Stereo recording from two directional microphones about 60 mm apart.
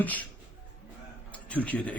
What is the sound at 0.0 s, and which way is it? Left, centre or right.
Speech, left.